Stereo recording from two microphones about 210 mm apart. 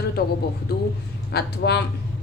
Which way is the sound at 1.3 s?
50° left (ahead or behind).